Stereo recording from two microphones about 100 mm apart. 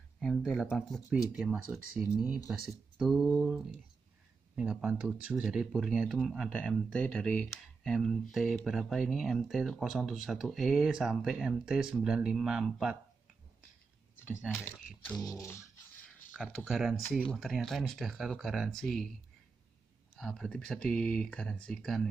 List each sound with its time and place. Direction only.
0.2 s speech: centre (ahead or behind)
6.9 s speech: 10° left (ahead or behind)
7.5 s speech: centre (ahead or behind)
15.2 s a sound: 30° left (ahead or behind)
16.3 s speech: centre (ahead or behind)
20.2 s speech: 5° left (ahead or behind)